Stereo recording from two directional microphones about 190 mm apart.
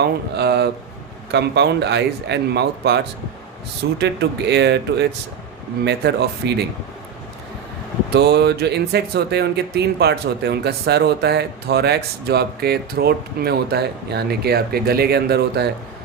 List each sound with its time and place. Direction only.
0.0 s speech: 60° right (ahead or behind)
8.1 s speech: 60° right (ahead or behind)